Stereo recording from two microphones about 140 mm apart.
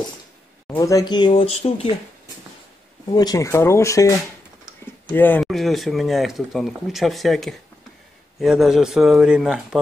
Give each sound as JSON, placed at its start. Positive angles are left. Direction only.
{"t": 0.7, "sound": "speech", "side_deg": 25}
{"t": 3.2, "sound": "speech", "side_deg": 25}
{"t": 5.1, "sound": "speech", "side_deg": 15}
{"t": 5.4, "sound": "speech", "side_deg": 0}